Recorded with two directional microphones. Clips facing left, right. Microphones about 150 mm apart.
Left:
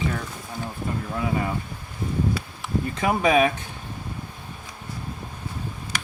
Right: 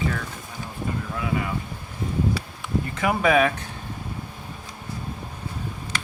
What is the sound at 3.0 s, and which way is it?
Speech, 20° left (ahead or behind).